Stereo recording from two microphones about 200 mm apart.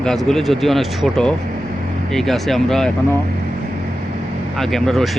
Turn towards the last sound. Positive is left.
turn(degrees=0)  # may be behind; listen again after turning